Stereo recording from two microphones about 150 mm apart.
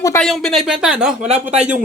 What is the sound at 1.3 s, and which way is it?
Speech, 50° right (ahead or behind).